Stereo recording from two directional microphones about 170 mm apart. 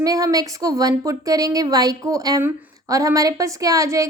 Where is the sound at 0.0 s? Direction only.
20° right (ahead or behind).